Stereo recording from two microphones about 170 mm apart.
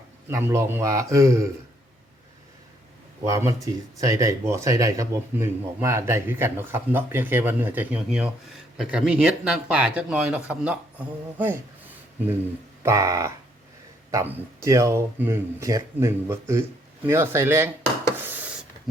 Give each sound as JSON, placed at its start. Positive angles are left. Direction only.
{"t": 0.3, "sound": "speech", "side_deg": -15}
{"t": 3.2, "sound": "speech", "side_deg": -20}
{"t": 12.8, "sound": "speech", "side_deg": -15}
{"t": 18.2, "sound": "a sound", "side_deg": -10}